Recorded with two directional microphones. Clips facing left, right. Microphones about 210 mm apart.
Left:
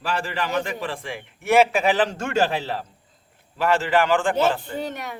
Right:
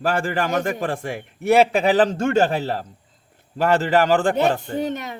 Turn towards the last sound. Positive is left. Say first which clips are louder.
# right 5 dB
turn(degrees=-25)  # may be behind; listen again after turning